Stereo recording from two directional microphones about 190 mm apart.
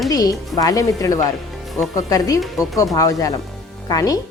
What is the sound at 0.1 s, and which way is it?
A woman's voice, 20° left (ahead or behind).